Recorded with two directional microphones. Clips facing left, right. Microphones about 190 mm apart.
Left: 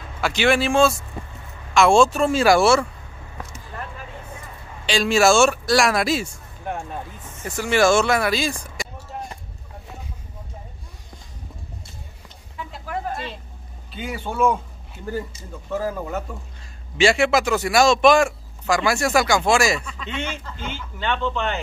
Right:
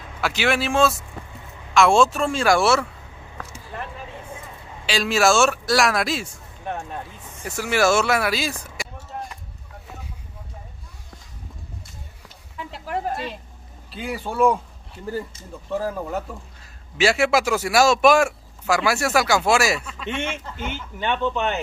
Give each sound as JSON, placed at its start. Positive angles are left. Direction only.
{"t": 0.2, "sound": "speech", "side_deg": -5}
{"t": 4.8, "sound": "a man's voice", "side_deg": -5}
{"t": 7.0, "sound": "speech", "side_deg": -5}
{"t": 12.9, "sound": "a sound", "side_deg": -40}
{"t": 13.9, "sound": "speech", "side_deg": 0}
{"t": 20.2, "sound": "speech", "side_deg": -20}